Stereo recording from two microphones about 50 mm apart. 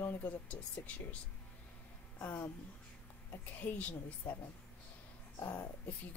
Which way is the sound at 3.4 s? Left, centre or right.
Left.